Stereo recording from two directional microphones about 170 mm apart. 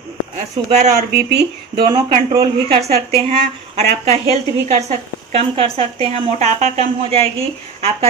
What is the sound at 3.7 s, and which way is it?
Speech, 40° right (ahead or behind).